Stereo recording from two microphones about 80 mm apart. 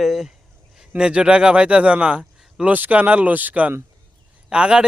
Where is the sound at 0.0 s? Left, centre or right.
Centre.